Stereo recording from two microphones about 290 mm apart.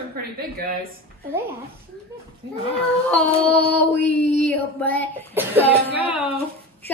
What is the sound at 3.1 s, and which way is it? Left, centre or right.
Female singing, centre.